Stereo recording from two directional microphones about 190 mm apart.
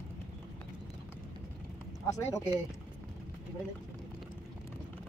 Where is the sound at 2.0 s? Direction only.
15° left (ahead or behind).